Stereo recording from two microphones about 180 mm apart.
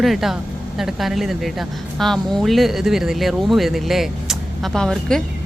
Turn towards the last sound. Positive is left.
turn(degrees=5)  # may be behind; listen again after turning